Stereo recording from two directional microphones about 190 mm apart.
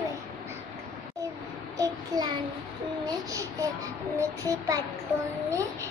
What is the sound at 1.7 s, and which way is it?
Child singing, 20° right (ahead or behind).